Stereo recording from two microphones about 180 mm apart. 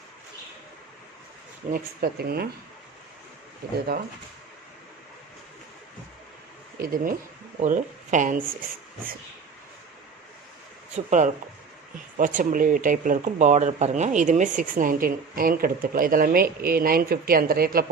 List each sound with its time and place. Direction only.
1.7 s speech: 60° right (ahead or behind)
6.8 s speech: 50° right (ahead or behind)
10.9 s speech: 40° right (ahead or behind)